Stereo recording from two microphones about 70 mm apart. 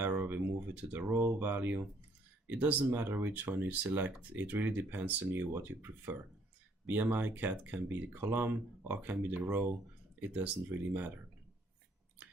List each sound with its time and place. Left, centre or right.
0.0 s speech: right